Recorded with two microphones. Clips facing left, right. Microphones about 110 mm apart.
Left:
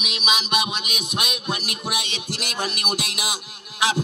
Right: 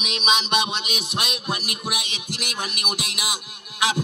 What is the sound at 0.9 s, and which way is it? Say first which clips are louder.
Music: even; 15° left (ahead or behind).